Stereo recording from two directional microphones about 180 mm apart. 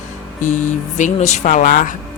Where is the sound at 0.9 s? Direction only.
40° left (ahead or behind).